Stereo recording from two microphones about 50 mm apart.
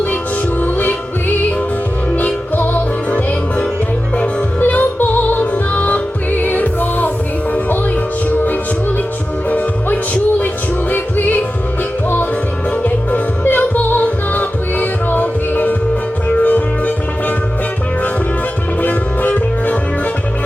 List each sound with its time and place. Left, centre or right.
0.6 s music: left
2.1 s music: left
4.6 s music: left
9.5 s music: left
12.7 s music: left
18.8 s music: left